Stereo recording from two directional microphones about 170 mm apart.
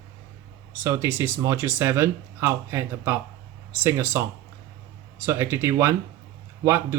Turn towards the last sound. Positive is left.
turn(degrees=-15)  # may be behind; listen again after turning